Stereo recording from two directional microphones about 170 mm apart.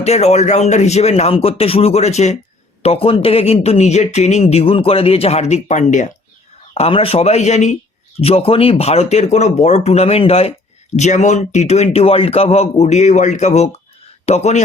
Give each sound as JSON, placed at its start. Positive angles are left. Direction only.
{"t": 0.0, "sound": "speech", "side_deg": 40}
{"t": 6.7, "sound": "speech", "side_deg": 35}